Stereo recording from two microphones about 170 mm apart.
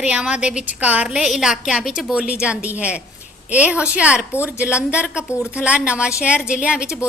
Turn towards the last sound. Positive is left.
turn(degrees=-5)  # may be behind; listen again after turning